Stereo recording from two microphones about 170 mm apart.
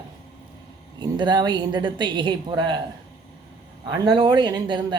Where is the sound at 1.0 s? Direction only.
25° right (ahead or behind).